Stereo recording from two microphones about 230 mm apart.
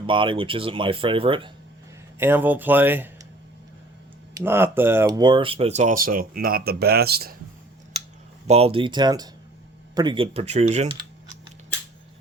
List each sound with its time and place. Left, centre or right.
0.0 s speech: right
2.1 s speech: centre
4.4 s speech: centre; by 7.3 s right
8.4 s speech: right